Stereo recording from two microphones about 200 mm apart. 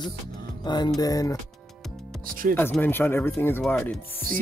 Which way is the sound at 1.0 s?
15° left (ahead or behind).